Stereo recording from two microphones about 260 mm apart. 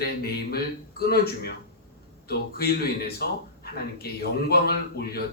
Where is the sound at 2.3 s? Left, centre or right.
Left.